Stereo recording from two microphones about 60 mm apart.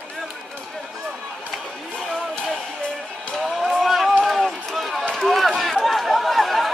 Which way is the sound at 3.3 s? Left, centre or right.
Centre.